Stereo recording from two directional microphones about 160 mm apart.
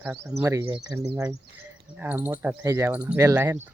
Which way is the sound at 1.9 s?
10° right (ahead or behind).